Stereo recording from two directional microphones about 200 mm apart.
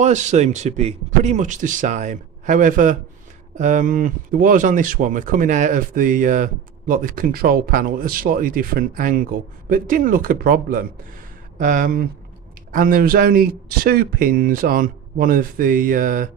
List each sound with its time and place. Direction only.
0.0 s speech: 35° right (ahead or behind)